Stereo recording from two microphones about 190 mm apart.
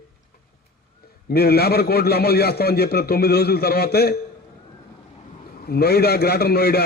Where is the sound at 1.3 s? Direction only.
55° left (ahead or behind).